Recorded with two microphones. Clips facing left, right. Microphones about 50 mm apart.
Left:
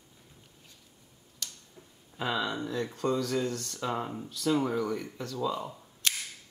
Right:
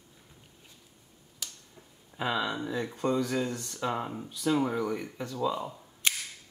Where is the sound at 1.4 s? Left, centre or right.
Centre.